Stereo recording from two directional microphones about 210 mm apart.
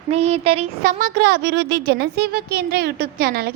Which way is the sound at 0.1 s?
30° right (ahead or behind).